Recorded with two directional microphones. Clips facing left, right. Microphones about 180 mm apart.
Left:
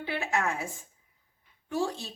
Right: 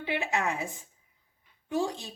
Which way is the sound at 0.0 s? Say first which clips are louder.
Even; 15° right (ahead or behind).